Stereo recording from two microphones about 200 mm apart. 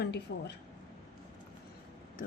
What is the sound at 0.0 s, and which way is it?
Speech, 55° left (ahead or behind).